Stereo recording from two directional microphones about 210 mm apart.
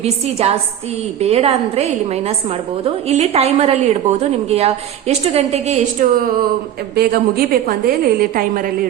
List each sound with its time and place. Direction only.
0.0 s a woman's voice: 30° right (ahead or behind)
6.9 s a woman's voice: 45° right (ahead or behind)